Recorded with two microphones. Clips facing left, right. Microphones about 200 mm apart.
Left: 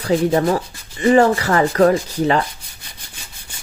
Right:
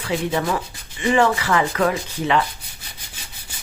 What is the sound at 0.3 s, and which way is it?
Speech, 45° left (ahead or behind).